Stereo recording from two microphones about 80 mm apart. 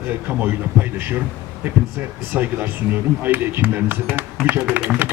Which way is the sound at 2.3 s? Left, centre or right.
Right.